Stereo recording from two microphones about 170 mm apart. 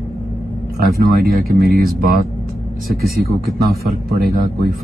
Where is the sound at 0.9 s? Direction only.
60° right (ahead or behind).